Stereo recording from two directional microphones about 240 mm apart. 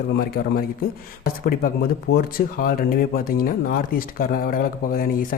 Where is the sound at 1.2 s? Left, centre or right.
Left.